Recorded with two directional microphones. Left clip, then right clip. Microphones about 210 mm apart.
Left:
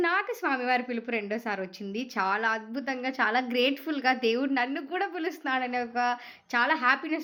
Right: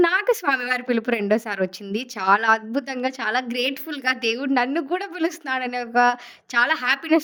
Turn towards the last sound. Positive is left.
turn(degrees=-55)  # may be behind; listen again after turning